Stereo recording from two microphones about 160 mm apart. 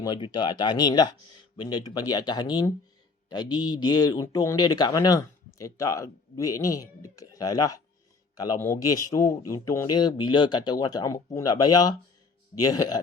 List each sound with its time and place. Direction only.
0.0 s speech: 25° left (ahead or behind)